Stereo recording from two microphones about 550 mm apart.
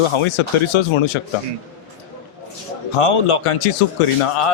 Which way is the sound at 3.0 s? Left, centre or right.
Left.